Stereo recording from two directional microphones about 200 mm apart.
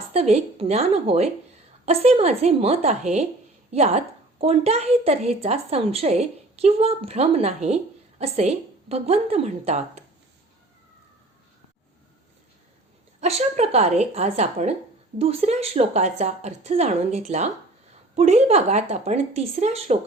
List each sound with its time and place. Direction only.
0.1 s a woman's voice: 30° right (ahead or behind)
13.1 s a woman's voice: 30° right (ahead or behind)